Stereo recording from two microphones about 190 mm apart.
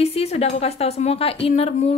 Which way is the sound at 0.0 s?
30° left (ahead or behind).